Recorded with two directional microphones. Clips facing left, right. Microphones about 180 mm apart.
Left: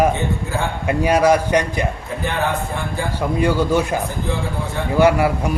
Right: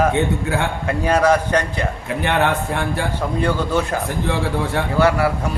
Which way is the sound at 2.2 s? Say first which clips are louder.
Right 3 dB; 75° right (ahead or behind).